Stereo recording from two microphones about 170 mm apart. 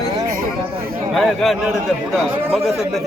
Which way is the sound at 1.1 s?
Centre (ahead or behind).